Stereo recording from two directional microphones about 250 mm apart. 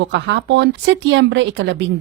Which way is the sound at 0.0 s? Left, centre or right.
Right.